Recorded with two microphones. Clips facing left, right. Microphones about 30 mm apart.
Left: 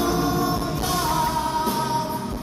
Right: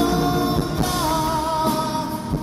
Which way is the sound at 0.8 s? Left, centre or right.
Centre.